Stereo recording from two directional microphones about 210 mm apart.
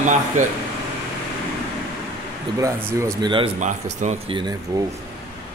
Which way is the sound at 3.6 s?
35° right (ahead or behind).